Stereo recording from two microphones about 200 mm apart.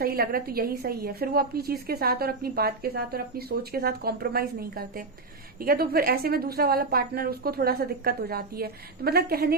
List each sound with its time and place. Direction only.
0.0 s a woman's voice: 50° right (ahead or behind)